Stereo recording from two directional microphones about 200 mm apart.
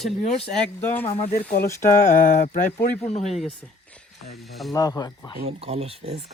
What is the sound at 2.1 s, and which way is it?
Speech, 40° left (ahead or behind).